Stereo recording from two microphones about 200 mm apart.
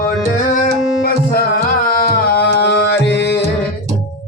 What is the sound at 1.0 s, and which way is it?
Tabla, 50° left (ahead or behind).